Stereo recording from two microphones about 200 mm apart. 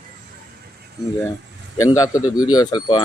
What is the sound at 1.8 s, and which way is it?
Speech, 15° left (ahead or behind).